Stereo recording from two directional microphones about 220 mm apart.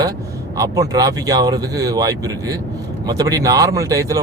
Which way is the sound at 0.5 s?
15° right (ahead or behind).